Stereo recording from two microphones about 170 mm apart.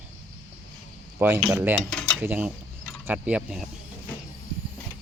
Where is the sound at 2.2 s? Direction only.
10° right (ahead or behind).